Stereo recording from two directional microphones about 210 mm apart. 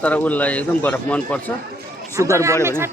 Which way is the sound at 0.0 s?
5° left (ahead or behind).